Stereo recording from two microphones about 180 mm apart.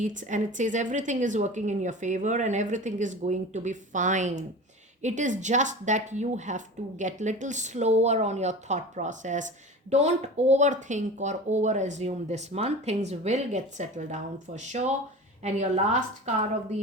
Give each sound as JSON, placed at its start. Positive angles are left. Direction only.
{"t": 0.0, "sound": "a woman's voice", "side_deg": -45}